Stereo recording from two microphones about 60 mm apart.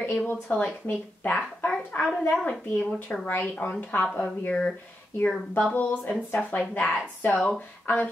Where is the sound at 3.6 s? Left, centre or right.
Left.